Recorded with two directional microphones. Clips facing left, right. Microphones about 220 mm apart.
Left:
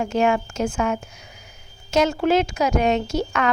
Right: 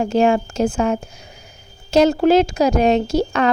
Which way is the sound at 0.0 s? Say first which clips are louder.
Right 4 dB; 30° right (ahead or behind).